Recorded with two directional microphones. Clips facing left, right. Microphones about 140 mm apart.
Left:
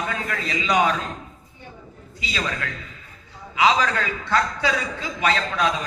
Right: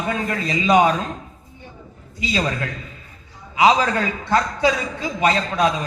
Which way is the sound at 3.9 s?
25° right (ahead or behind).